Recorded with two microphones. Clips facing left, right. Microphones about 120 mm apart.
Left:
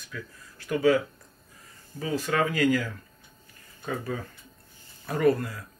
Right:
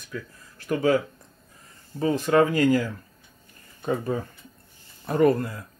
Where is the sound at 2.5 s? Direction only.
40° right (ahead or behind).